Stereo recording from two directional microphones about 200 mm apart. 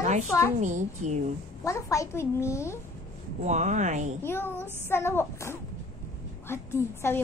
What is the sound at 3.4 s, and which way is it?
Speech, 35° right (ahead or behind).